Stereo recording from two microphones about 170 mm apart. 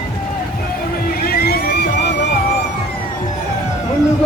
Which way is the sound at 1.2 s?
65° left (ahead or behind).